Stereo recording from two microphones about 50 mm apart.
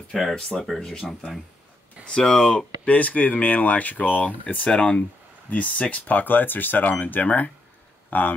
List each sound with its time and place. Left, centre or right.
0.1 s speech: centre
2.0 s speech: centre; by 4.6 s left
4.6 s speech: left